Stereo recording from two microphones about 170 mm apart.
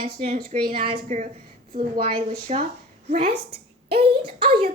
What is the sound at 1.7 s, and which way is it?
Speech, 55° right (ahead or behind).